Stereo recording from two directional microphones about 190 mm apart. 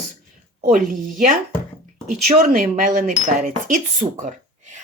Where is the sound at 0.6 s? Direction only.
45° right (ahead or behind).